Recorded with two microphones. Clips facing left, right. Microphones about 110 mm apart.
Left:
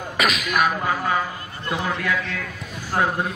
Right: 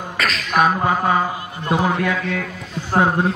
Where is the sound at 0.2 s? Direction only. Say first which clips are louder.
Left 1 dB; 15° left (ahead or behind).